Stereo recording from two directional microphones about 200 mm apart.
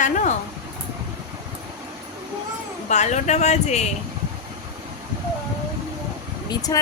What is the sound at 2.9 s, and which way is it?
Speech, 35° left (ahead or behind).